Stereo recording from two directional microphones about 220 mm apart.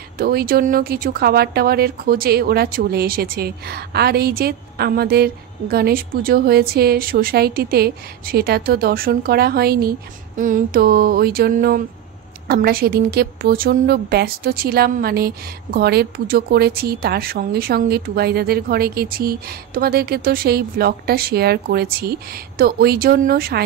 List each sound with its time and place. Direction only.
0.2 s speech: 45° right (ahead or behind)